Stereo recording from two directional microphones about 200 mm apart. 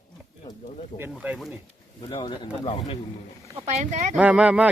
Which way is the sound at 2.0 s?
20° left (ahead or behind).